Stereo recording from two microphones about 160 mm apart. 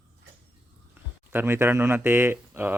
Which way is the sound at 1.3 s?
15° right (ahead or behind).